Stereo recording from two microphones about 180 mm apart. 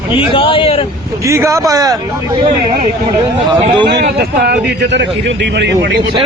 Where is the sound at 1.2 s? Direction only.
15° right (ahead or behind).